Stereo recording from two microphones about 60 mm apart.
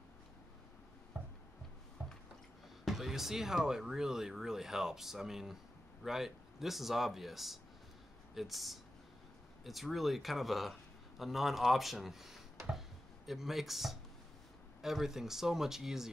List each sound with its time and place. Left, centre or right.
1.1 s a sound: right
2.0 s squish: right
2.8 s speech: centre